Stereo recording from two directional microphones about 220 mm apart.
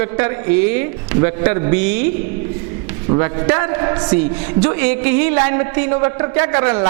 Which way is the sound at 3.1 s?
20° right (ahead or behind).